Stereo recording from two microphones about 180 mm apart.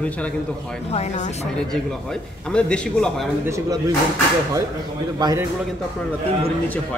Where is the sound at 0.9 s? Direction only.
40° left (ahead or behind).